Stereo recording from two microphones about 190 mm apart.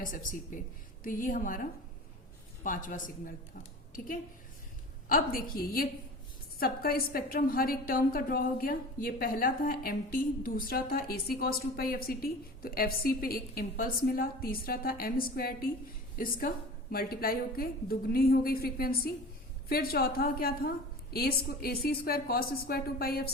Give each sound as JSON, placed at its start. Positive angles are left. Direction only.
{"t": 0.0, "sound": "a woman's voice", "side_deg": 45}
{"t": 2.6, "sound": "a woman's voice", "side_deg": 45}